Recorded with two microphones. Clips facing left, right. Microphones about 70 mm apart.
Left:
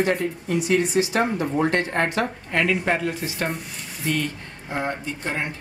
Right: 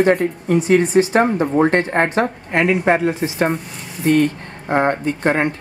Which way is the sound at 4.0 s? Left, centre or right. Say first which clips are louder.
Right 11 dB; right.